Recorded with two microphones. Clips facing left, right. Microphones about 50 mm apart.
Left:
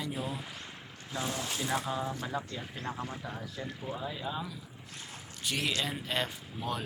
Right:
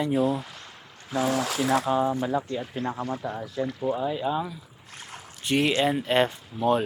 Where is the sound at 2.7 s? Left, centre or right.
Right.